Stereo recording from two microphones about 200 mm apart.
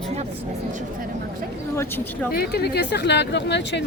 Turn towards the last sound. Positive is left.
turn(degrees=60)  # may be behind; listen again after turning